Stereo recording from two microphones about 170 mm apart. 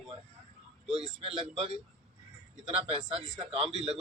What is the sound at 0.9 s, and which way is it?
Speech, 35° right (ahead or behind).